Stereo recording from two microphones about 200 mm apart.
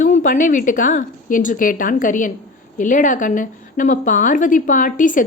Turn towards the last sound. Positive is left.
turn(degrees=40)  # may be behind; listen again after turning